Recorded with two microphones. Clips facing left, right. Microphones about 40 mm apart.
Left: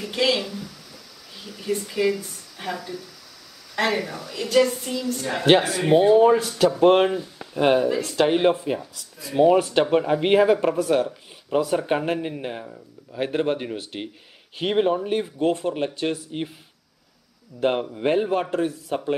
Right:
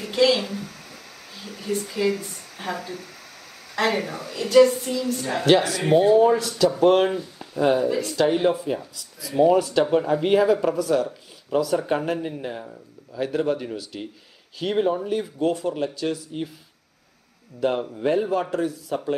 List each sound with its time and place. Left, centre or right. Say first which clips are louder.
0.1 s speech: right 3 dB; centre
0.4 s a sound: right 1 dB; right
2.1 s a woman's voice: right 1 dB; right
4.5 s a sound: right 4 dB; centre
5.4 s speech: left 1 dB; left
7.3 s speech: left 2 dB; left
10.2 s speech: left 2 dB; left
13.1 s speech: even; left
17.6 s speech: left 1 dB; left